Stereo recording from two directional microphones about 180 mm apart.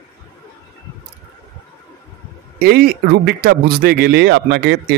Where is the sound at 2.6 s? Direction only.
60° right (ahead or behind).